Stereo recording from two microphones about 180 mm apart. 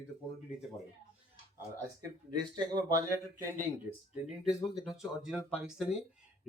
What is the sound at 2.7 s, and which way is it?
Speech, 15° right (ahead or behind).